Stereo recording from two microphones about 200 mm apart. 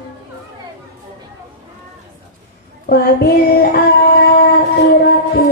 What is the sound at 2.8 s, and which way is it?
Child singing, 50° left (ahead or behind).